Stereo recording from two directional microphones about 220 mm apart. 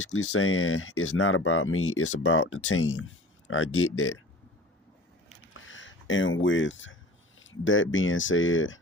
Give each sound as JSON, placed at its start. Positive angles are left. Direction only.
{"t": 0.1, "sound": "speech", "side_deg": 65}
{"t": 5.6, "sound": "speech", "side_deg": 60}